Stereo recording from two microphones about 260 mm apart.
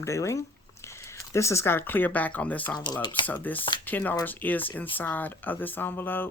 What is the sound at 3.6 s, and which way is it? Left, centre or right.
Speech, centre.